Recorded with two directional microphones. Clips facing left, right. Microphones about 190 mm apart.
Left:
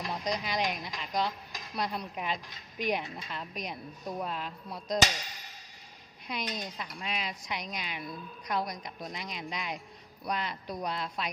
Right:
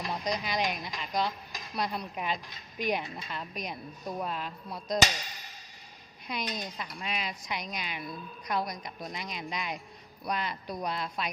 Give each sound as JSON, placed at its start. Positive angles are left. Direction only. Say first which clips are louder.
{"t": 0.0, "sound": "speech", "louder": "right 1 dB", "side_deg": -5}
{"t": 6.2, "sound": "speech", "louder": "right 1 dB", "side_deg": 0}